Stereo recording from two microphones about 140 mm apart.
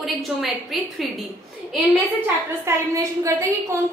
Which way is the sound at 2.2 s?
20° right (ahead or behind).